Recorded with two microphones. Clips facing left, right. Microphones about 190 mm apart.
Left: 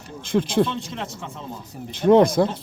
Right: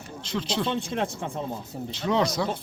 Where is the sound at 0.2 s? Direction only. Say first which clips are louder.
Left 9 dB; 50° left (ahead or behind).